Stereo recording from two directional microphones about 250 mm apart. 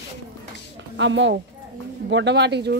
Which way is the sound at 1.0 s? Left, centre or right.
Right.